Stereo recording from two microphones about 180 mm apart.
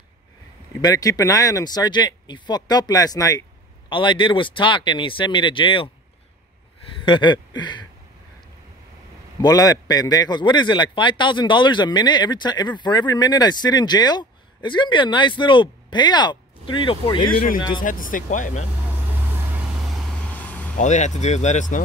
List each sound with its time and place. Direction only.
0.7 s a man's voice: 20° left (ahead or behind)
7.1 s a man's voice: 25° left (ahead or behind)
9.4 s a man's voice: 20° left (ahead or behind)
17.8 s speech: 50° left (ahead or behind)
19.3 s vehicle: centre (ahead or behind)
20.7 s speech: 40° left (ahead or behind)